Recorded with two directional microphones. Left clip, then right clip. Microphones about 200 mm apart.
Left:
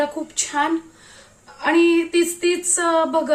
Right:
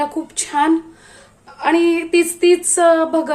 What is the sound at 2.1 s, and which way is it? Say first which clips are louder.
Speech: right 6 dB; 50° right (ahead or behind).